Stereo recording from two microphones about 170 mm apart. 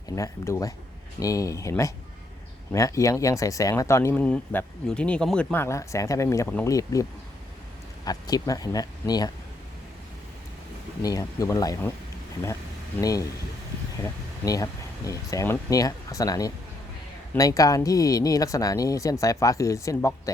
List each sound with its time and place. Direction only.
0.2 s speech: 15° left (ahead or behind)
11.0 s speech: 20° left (ahead or behind)
13.0 s speech: 20° left (ahead or behind)